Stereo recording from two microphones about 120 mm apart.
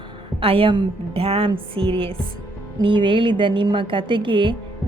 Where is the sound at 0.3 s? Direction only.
50° right (ahead or behind).